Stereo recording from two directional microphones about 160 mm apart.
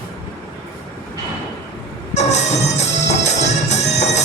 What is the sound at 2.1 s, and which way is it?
Music, 45° left (ahead or behind).